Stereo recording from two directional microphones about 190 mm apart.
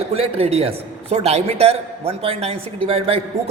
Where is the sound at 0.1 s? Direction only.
30° right (ahead or behind).